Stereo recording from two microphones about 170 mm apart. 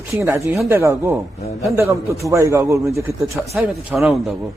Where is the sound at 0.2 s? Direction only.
15° right (ahead or behind).